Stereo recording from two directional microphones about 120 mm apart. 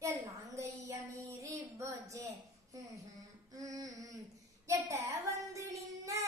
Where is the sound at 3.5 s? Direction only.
30° right (ahead or behind).